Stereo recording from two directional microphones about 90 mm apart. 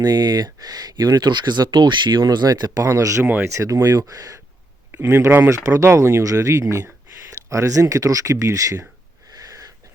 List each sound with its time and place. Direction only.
0.0 s speech: 45° right (ahead or behind)
4.9 s speech: 25° right (ahead or behind)
9.3 s wheeze: 40° right (ahead or behind)